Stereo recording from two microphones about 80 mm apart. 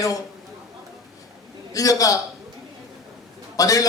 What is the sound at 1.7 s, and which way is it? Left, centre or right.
Speech, left.